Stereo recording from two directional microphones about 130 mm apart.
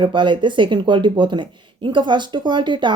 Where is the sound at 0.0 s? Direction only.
40° right (ahead or behind).